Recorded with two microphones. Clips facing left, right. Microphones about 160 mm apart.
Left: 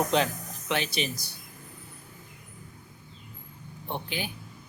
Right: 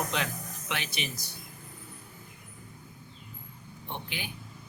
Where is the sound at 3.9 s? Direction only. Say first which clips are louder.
Left 5 dB; 35° left (ahead or behind).